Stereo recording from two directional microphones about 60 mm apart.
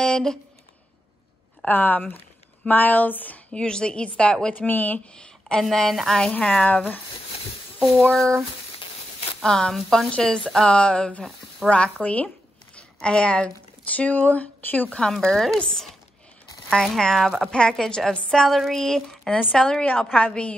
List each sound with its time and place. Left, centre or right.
0.0 s a sound: centre
1.7 s speech: left
3.5 s a woman's voice: centre
4.6 s speech: left
5.1 s a woman's voice: centre
6.5 s speech: left
8.0 s a woman's voice: centre
9.4 s a woman's voice: centre; by 15.0 s left
15.2 s a woman's voice: centre
17.5 s a woman's voice: centre